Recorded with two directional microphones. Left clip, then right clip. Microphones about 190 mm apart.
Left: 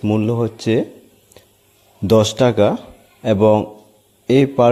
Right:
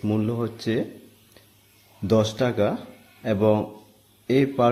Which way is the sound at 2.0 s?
40° left (ahead or behind).